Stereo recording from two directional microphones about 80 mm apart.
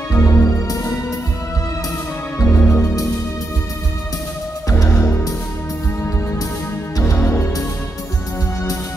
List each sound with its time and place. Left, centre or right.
0.1 s music: left
2.3 s music: left
2.7 s music: left
4.9 s music: left
7.2 s music: left